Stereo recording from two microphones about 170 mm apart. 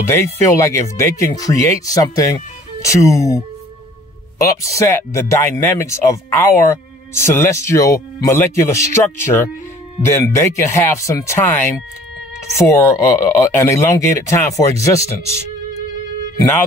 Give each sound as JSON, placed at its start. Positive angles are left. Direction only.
{"t": 0.1, "sound": "speech", "side_deg": 20}